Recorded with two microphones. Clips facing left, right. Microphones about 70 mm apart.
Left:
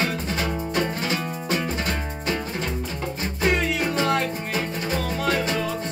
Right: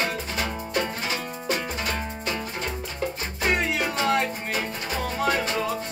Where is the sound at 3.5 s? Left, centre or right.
Centre.